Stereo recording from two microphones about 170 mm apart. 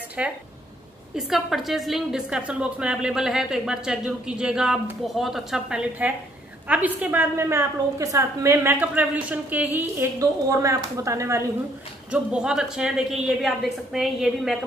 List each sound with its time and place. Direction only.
0.2 s a woman's voice: 5° right (ahead or behind)
12.1 s a woman's voice: 5° right (ahead or behind)